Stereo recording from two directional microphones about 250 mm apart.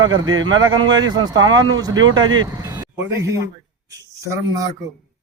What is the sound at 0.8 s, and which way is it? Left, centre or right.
Speech, centre.